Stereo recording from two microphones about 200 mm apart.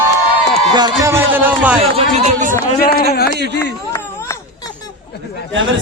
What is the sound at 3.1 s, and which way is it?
Speech, 50° left (ahead or behind).